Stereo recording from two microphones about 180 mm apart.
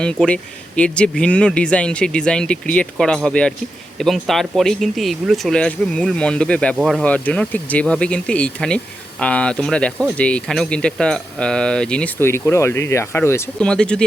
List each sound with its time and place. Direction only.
0.0 s speech: 5° left (ahead or behind)